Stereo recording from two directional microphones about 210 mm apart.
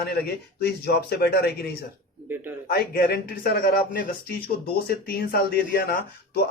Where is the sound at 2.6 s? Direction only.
45° left (ahead or behind).